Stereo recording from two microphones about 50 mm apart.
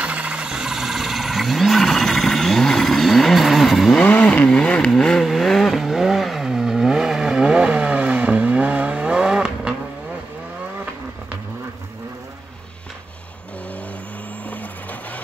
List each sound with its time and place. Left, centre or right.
0.0 s a sound: right; by 3.9 s centre
4.0 s vehicle: left
4.5 s vehicle: centre
5.2 s vehicle: centre
14.5 s music: left